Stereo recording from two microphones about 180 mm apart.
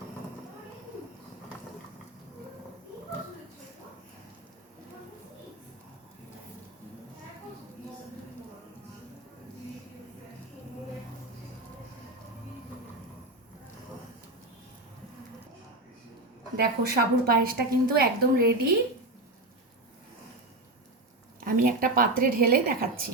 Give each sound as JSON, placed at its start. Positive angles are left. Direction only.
{"t": 16.6, "sound": "a woman's voice", "side_deg": -55}
{"t": 21.4, "sound": "a woman's voice", "side_deg": -50}